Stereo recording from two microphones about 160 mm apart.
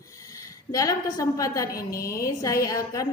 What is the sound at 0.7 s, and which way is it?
A woman's voice, 20° left (ahead or behind).